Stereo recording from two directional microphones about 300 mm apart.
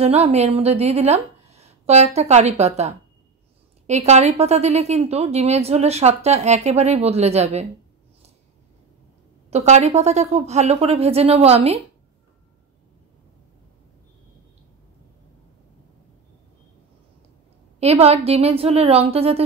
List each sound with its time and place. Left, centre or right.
0.0 s a woman's voice: right
9.5 s a woman's voice: right
17.7 s a woman's voice: right